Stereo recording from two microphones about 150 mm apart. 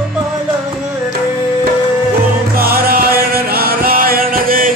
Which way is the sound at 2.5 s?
85° right.